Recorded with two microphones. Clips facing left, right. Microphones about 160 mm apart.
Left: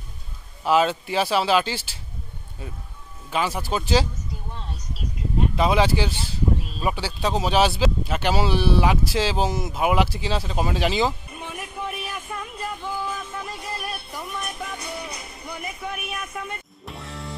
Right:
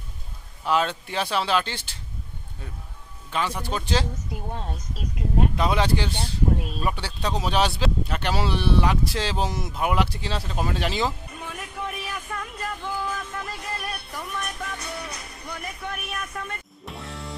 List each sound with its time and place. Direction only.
0.7 s speech: 5° left (ahead or behind)
3.3 s speech: 5° left (ahead or behind)
4.5 s speech: 45° right (ahead or behind)
5.6 s speech: 5° left (ahead or behind)
11.3 s music: 15° left (ahead or behind)